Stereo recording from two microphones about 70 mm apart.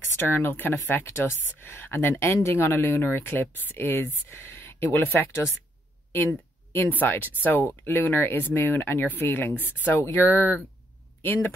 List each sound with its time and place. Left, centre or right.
0.2 s speech: left
5.0 s speech: left
10.0 s speech: left